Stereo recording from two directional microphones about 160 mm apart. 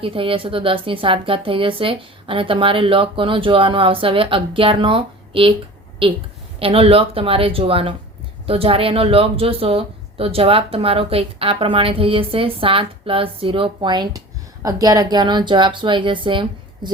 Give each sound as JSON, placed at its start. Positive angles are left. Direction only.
{"t": 0.0, "sound": "speech", "side_deg": -35}
{"t": 6.6, "sound": "speech", "side_deg": -35}